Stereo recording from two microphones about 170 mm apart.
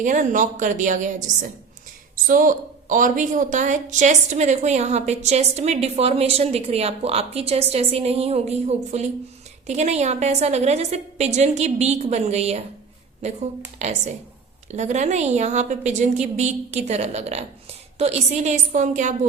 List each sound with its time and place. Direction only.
0.0 s a woman's voice: 50° right (ahead or behind)
13.7 s a woman's voice: 40° right (ahead or behind)